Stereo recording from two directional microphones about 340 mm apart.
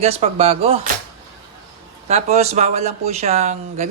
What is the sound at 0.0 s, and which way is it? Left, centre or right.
Speech, centre.